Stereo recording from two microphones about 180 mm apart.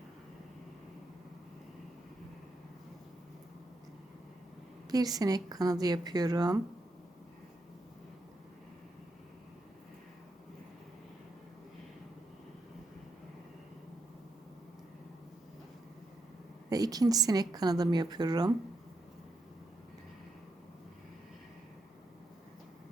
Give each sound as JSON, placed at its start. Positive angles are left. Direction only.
{"t": 4.9, "sound": "a woman's voice", "side_deg": -20}
{"t": 16.6, "sound": "a woman's voice", "side_deg": -20}